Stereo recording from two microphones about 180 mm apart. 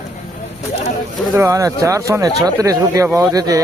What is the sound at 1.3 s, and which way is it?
Speech, 15° right (ahead or behind).